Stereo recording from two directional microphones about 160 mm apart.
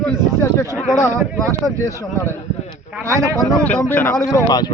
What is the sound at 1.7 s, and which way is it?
Speech, 20° left (ahead or behind).